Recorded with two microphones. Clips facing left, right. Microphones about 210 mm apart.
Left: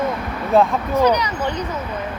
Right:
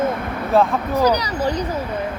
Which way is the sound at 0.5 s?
Centre (ahead or behind).